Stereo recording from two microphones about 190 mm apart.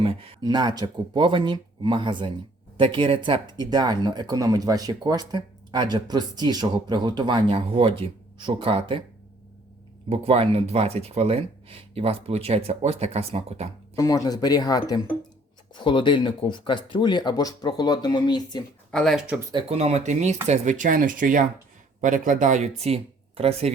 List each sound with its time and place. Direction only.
0.0 s speech: 30° right (ahead or behind)
10.1 s speech: 30° right (ahead or behind)
13.9 s speech: 15° left (ahead or behind)
18.9 s speech: 5° left (ahead or behind)
19.5 s speech: 30° right (ahead or behind)